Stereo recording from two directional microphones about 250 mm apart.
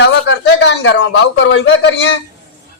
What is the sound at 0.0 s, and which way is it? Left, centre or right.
A man's voice, left.